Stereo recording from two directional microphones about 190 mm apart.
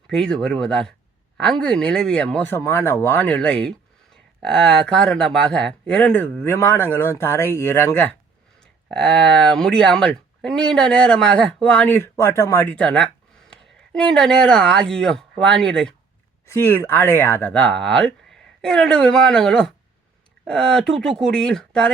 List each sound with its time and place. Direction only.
0.1 s speech: 5° left (ahead or behind)